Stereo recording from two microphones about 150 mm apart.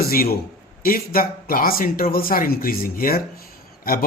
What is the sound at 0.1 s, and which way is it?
A man's voice, 80° left.